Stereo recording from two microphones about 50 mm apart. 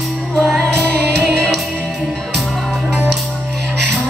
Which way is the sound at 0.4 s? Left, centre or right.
Centre.